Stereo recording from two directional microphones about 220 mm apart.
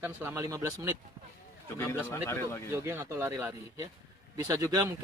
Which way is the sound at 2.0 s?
10° left (ahead or behind).